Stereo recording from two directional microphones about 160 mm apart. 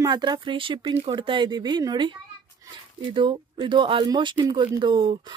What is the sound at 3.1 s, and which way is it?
Speech, 30° right (ahead or behind).